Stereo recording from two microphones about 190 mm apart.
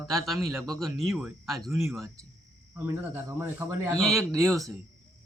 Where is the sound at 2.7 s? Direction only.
15° right (ahead or behind).